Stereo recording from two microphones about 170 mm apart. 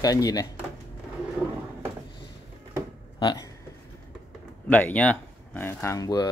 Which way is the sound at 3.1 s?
25° left (ahead or behind).